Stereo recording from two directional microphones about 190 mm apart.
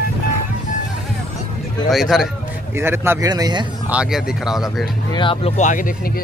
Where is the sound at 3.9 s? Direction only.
5° right (ahead or behind).